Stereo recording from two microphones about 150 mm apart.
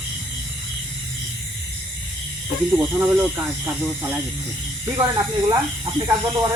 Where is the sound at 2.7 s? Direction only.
10° right (ahead or behind).